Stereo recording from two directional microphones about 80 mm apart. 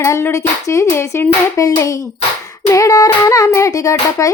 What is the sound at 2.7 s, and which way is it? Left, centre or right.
Child singing, left.